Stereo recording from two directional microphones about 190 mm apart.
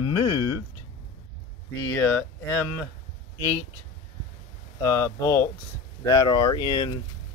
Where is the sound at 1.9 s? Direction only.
10° left (ahead or behind).